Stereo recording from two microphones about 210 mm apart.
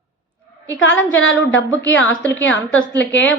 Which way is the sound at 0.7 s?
60° left (ahead or behind).